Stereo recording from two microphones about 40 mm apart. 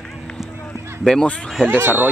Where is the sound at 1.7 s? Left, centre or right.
Right.